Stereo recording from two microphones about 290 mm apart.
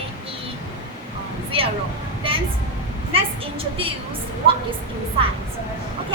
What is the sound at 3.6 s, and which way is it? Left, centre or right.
Speech, centre.